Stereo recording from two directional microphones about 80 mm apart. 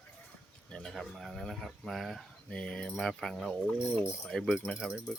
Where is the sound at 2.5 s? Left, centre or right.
Centre.